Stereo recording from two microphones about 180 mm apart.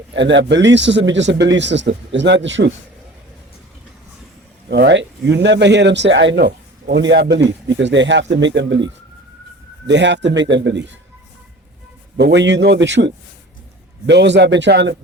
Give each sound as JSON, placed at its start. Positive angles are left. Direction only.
{"t": 0.1, "sound": "a man's voice", "side_deg": -85}
{"t": 4.7, "sound": "a man's voice", "side_deg": -65}
{"t": 9.8, "sound": "a man's voice", "side_deg": -75}
{"t": 12.1, "sound": "a man's voice", "side_deg": -75}